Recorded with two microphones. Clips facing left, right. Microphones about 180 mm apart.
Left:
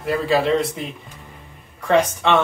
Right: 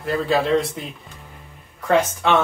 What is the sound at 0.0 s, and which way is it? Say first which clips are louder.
Speech: left 1 dB; centre (ahead or behind).